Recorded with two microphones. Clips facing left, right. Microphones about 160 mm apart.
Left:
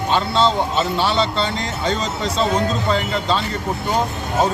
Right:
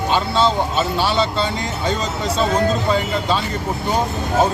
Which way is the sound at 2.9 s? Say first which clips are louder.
Right 1 dB; 5° right (ahead or behind).